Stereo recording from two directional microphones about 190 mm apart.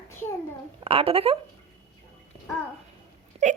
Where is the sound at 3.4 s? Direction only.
40° right (ahead or behind).